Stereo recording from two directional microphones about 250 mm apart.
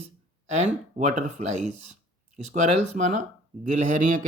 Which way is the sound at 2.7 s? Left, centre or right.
Right.